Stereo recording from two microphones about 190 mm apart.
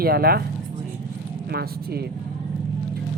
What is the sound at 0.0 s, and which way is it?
Speech, 55° right (ahead or behind).